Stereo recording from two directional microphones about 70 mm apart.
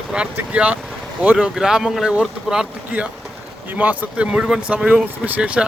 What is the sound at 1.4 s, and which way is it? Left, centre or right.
Speech, centre.